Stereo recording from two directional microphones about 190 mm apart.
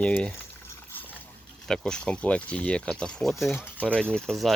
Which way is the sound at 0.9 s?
10° left (ahead or behind).